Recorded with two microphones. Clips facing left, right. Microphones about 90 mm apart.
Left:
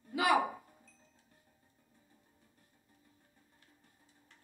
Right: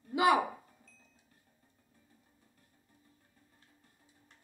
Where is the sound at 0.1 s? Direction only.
20° right (ahead or behind).